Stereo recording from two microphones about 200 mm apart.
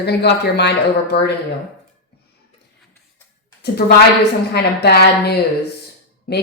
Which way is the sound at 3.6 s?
55° left (ahead or behind).